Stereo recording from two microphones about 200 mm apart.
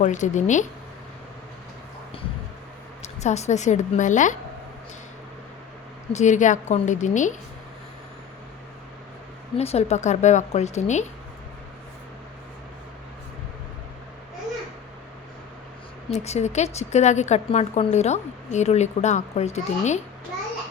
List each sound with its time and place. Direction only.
0.0 s a woman's voice: 40° left (ahead or behind)
3.0 s a woman's voice: 35° left (ahead or behind)
6.1 s a woman's voice: 35° left (ahead or behind)
9.6 s a woman's voice: 30° left (ahead or behind)
16.1 s a woman's voice: 35° left (ahead or behind)